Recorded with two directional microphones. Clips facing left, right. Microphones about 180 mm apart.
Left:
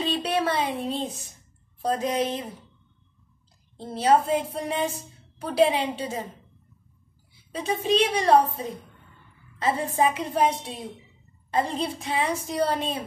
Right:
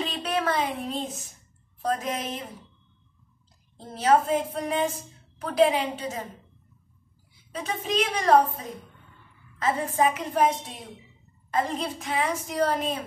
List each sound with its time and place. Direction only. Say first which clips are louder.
0.0 s speech: left 3 dB; 30° left (ahead or behind)
3.7 s a woman's voice: left 1 dB; 30° left (ahead or behind)
7.5 s a woman's voice: left 4 dB; 30° left (ahead or behind)
11.5 s a woman's voice: left 1 dB; 30° left (ahead or behind)